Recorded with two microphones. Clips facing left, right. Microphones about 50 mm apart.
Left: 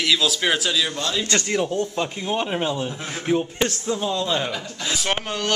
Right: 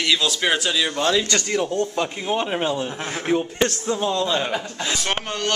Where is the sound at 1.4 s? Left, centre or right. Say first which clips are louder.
Even; centre.